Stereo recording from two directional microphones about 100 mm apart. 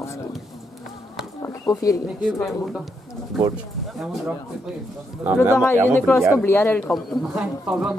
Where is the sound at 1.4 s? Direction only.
30° left (ahead or behind).